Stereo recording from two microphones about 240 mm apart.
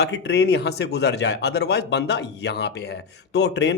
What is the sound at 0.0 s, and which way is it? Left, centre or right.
Speech, left.